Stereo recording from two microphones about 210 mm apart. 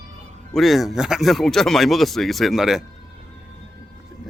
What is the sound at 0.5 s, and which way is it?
Speech, centre (ahead or behind).